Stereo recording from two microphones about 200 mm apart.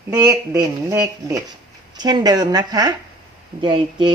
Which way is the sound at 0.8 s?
15° right (ahead or behind).